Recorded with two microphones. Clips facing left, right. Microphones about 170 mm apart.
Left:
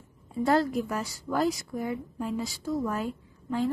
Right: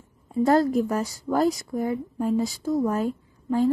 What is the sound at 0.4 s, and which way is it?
A woman's voice, 40° right (ahead or behind).